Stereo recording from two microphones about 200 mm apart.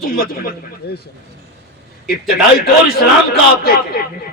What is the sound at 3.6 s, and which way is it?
Speech, 50° left (ahead or behind).